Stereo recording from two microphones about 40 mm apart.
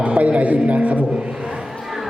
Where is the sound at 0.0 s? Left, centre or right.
Right.